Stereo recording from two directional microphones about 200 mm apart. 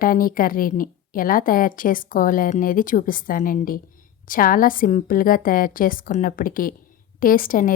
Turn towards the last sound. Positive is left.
turn(degrees=45)  # may be behind; listen again after turning